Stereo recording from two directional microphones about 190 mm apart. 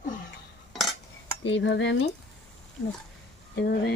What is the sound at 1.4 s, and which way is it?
Speech, 75° left (ahead or behind).